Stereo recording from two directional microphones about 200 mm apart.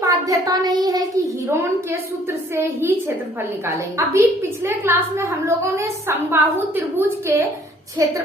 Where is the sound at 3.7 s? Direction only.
15° right (ahead or behind).